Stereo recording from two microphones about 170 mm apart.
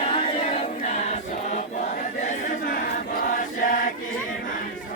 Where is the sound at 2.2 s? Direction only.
50° left (ahead or behind).